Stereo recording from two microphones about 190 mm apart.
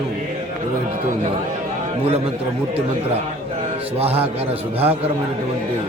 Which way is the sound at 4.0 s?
30° right (ahead or behind).